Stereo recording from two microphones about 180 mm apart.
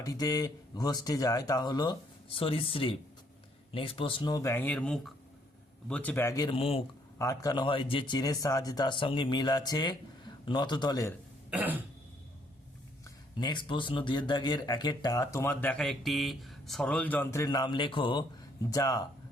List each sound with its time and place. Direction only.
0.0 s a man's voice: 20° left (ahead or behind)
6.5 s speech: 30° left (ahead or behind)
7.2 s speech: 20° left (ahead or behind)
11.5 s throat clearing: 10° right (ahead or behind)
13.1 s speech: 25° left (ahead or behind)